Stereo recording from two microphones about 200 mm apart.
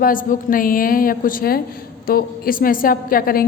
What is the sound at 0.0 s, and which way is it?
A woman's voice, 45° left (ahead or behind).